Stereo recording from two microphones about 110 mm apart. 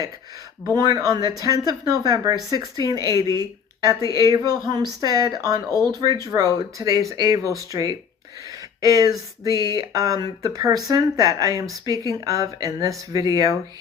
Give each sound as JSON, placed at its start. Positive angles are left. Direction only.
{"t": 0.7, "sound": "speech", "side_deg": -35}
{"t": 4.2, "sound": "speech", "side_deg": -35}
{"t": 9.5, "sound": "speech", "side_deg": 35}
{"t": 9.7, "sound": "speech", "side_deg": -35}